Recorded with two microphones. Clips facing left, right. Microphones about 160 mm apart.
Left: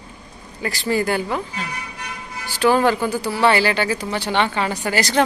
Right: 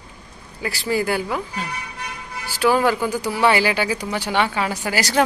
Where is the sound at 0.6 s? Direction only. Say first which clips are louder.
Left 1 dB; 10° right (ahead or behind).